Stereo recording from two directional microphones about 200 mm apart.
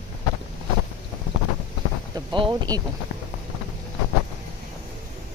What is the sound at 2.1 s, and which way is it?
Speech, 20° right (ahead or behind).